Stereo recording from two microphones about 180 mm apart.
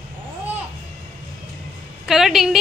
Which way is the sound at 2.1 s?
Centre (ahead or behind).